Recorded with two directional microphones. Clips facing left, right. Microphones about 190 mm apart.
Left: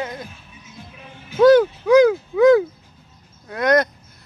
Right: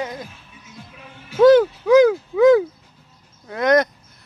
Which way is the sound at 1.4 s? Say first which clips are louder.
Even; 20° right (ahead or behind).